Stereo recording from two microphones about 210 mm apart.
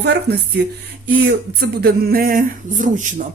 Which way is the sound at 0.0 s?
50° right (ahead or behind).